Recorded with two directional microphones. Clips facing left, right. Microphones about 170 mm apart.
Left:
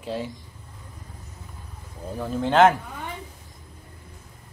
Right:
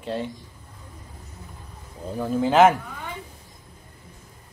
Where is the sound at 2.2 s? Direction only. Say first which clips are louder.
Right 1 dB; centre (ahead or behind).